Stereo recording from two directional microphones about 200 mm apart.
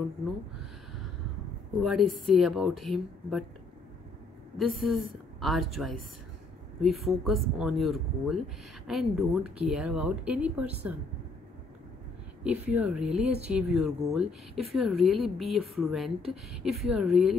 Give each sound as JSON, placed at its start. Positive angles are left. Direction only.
{"t": 1.8, "sound": "speech", "side_deg": 0}
{"t": 4.6, "sound": "speech", "side_deg": 0}
{"t": 12.4, "sound": "speech", "side_deg": -5}